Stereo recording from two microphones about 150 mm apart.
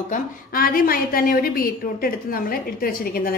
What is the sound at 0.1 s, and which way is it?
A woman's voice, 75° left (ahead or behind).